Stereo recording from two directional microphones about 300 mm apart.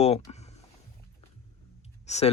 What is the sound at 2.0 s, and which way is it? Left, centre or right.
Speech, left.